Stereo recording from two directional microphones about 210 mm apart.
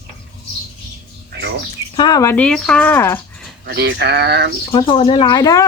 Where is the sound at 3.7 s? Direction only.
55° right (ahead or behind).